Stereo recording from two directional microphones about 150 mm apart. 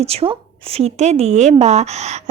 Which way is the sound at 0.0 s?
40° right (ahead or behind).